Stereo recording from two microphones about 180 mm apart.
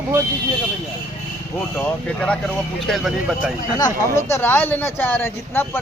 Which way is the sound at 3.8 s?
20° left (ahead or behind).